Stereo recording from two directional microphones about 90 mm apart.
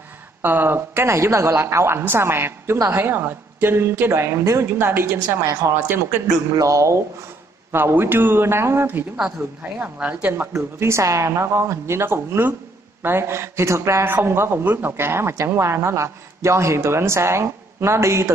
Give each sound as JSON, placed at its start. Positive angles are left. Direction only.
{"t": 0.4, "sound": "a woman's voice", "side_deg": -25}
{"t": 7.7, "sound": "a woman's voice", "side_deg": -25}
{"t": 10.8, "sound": "a woman's voice", "side_deg": -30}